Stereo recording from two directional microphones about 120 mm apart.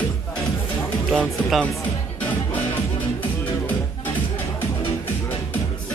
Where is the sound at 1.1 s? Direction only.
5° left (ahead or behind).